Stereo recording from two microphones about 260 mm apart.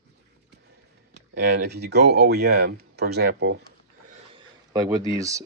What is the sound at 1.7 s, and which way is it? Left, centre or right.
Speech, right.